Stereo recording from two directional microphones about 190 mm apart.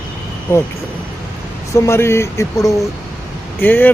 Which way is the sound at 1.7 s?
15° left (ahead or behind).